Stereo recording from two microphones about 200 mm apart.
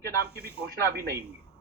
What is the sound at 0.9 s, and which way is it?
Speech, 50° right (ahead or behind).